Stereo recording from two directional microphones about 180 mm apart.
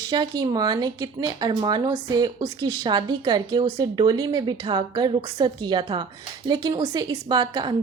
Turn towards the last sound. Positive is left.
turn(degrees=-25)  # may be behind; listen again after turning